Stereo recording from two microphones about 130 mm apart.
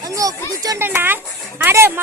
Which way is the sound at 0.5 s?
25° right (ahead or behind).